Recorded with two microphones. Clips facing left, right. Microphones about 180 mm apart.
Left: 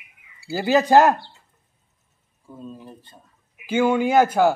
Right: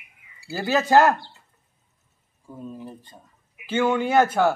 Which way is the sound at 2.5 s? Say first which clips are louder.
Right 2 dB; 15° right (ahead or behind).